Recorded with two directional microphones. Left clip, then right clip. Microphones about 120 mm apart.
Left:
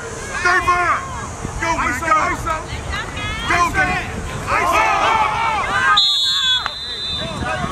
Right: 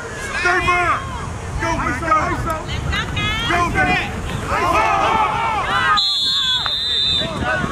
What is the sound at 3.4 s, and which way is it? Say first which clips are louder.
Vehicle: left 3 dB; 30° left (ahead or behind).